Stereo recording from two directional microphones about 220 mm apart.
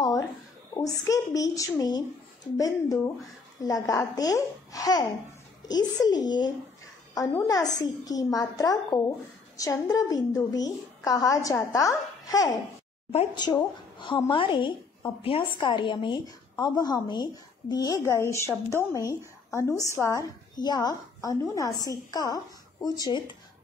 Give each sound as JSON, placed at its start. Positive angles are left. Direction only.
{"t": 0.7, "sound": "a woman's voice", "side_deg": 15}